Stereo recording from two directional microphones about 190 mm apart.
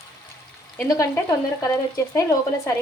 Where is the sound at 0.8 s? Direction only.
15° left (ahead or behind).